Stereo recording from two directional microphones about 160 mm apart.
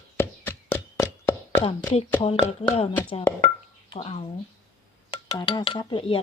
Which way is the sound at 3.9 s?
35° left (ahead or behind).